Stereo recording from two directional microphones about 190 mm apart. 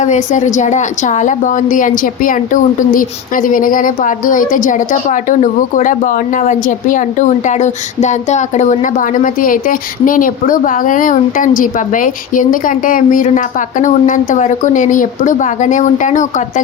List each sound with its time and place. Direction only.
0.0 s a woman's voice: 40° left (ahead or behind)